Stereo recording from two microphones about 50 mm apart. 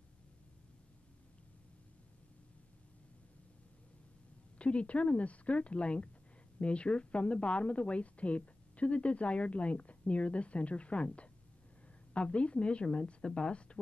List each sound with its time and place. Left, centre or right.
4.6 s a woman's voice: left